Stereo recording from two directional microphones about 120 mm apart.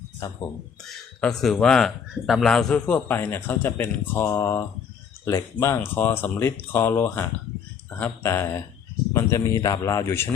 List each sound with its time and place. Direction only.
0.9 s speech: 5° left (ahead or behind); by 10.2 s 25° left (ahead or behind)